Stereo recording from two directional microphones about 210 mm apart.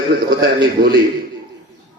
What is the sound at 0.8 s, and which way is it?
Music, 45° right (ahead or behind).